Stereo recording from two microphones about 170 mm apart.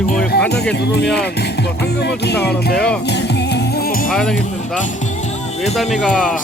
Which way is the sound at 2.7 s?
5° left (ahead or behind).